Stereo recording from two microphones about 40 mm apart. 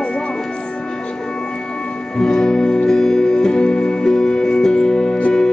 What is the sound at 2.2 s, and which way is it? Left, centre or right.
Music, centre.